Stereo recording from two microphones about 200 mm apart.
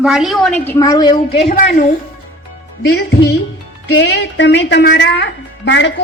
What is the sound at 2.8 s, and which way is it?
Speech, 55° left (ahead or behind).